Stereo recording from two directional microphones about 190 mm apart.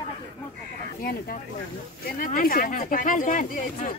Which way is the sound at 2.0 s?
45° left (ahead or behind).